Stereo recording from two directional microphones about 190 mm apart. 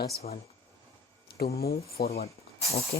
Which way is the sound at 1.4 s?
55° left (ahead or behind).